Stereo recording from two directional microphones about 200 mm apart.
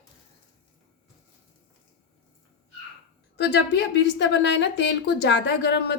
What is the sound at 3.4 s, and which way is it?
A woman's voice, 55° left (ahead or behind).